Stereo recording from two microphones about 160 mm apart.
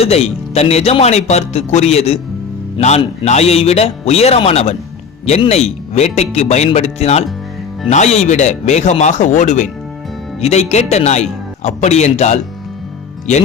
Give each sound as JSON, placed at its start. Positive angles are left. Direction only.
{"t": 0.0, "sound": "speech", "side_deg": 40}